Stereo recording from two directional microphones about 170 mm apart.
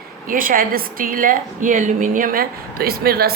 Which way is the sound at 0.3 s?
55° right (ahead or behind).